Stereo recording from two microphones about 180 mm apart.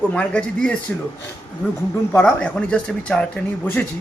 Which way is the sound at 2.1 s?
10° left (ahead or behind).